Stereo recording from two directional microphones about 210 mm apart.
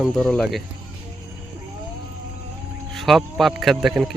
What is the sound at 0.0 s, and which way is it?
Speech, centre (ahead or behind).